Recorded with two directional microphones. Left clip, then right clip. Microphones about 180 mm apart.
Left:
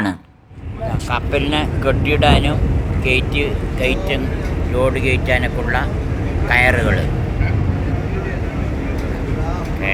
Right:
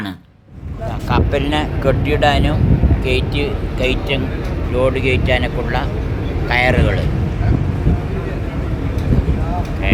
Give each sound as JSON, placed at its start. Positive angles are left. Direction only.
{"t": 1.1, "sound": "speech", "side_deg": -15}